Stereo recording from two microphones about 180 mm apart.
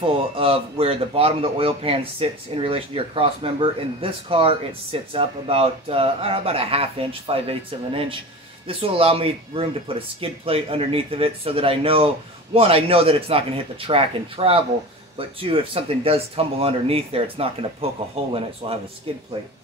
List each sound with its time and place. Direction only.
0.0 s speech: 30° right (ahead or behind)